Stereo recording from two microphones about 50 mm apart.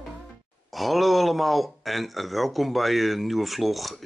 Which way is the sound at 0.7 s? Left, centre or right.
Centre.